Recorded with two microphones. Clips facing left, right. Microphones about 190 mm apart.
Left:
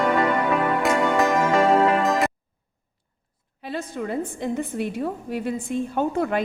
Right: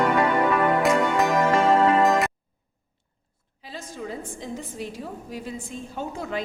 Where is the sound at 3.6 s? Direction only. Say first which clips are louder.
Left 6 dB; 60° left (ahead or behind).